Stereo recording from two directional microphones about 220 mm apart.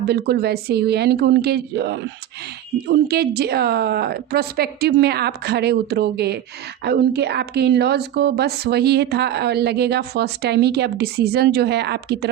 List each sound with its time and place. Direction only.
0.1 s a woman's voice: 45° right (ahead or behind)